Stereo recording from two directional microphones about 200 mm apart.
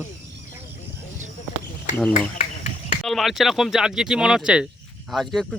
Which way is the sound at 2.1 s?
40° left (ahead or behind).